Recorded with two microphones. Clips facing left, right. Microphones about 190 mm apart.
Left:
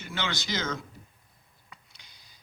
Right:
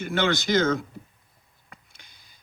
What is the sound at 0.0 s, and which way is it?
Speech, 50° right (ahead or behind).